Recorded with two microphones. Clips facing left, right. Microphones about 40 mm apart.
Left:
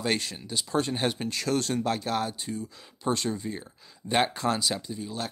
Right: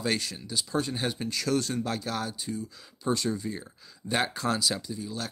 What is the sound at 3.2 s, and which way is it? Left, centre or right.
Speech, left.